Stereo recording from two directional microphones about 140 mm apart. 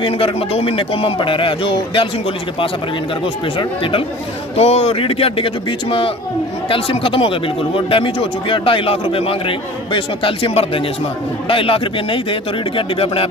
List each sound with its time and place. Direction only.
0.0 s speech: 40° left (ahead or behind)
3.5 s speech: 40° left (ahead or behind)